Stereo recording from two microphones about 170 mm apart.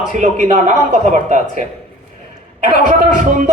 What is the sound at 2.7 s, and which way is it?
Speech, 45° right (ahead or behind).